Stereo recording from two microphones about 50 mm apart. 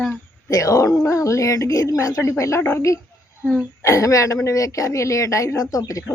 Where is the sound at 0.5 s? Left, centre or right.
Left.